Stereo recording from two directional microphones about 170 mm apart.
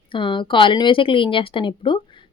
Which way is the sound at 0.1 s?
30° left (ahead or behind).